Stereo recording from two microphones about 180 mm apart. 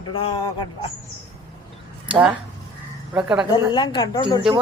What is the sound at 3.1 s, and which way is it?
Speech, 5° right (ahead or behind).